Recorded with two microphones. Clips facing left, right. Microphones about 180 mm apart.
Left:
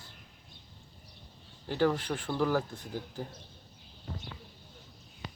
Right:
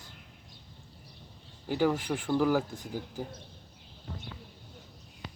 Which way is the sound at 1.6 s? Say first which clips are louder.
Right 1 dB; 10° right (ahead or behind).